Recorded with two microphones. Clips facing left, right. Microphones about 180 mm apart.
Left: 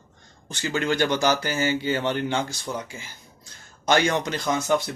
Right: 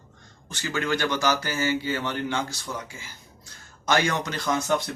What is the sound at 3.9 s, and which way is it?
Speech, 25° left (ahead or behind).